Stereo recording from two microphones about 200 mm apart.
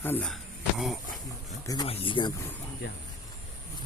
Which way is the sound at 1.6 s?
20° left (ahead or behind).